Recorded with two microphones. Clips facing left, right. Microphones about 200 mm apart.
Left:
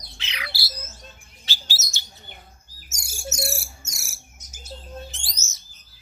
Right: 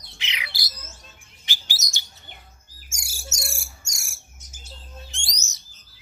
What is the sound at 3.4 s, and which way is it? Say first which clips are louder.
Bird: left 8 dB; 65° left (ahead or behind).